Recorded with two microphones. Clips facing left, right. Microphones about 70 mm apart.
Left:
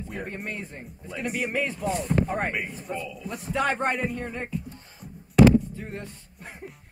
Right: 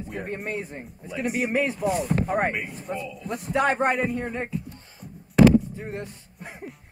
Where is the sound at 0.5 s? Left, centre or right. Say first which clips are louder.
Right 4 dB; centre.